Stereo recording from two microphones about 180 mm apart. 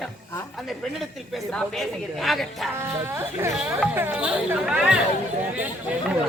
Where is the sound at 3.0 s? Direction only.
15° right (ahead or behind).